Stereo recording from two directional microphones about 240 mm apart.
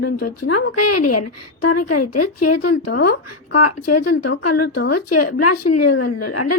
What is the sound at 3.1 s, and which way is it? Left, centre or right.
A woman's voice, left.